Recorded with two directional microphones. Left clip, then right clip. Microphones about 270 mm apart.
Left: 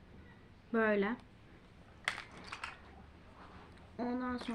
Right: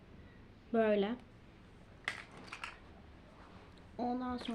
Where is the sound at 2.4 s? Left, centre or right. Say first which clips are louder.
Left 1 dB; centre.